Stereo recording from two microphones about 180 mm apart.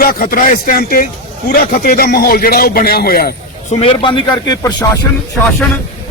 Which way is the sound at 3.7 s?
30° left (ahead or behind).